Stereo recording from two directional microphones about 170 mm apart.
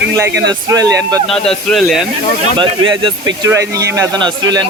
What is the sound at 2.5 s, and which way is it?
Speech, 30° right (ahead or behind).